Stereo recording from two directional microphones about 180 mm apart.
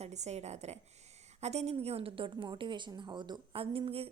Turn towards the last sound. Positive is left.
turn(degrees=-30)  # may be behind; listen again after turning